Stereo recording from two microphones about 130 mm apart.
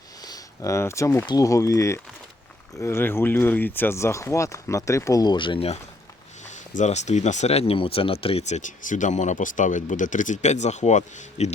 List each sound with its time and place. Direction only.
0.2 s a sound: 30° left (ahead or behind)
1.3 s speech: 25° left (ahead or behind); by 5.8 s 50° left (ahead or behind)
6.4 s speech: 65° left (ahead or behind)